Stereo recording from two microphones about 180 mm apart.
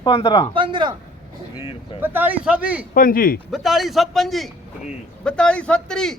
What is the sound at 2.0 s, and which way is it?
Speech, 10° right (ahead or behind).